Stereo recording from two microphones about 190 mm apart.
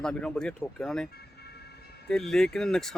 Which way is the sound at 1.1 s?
55° left (ahead or behind).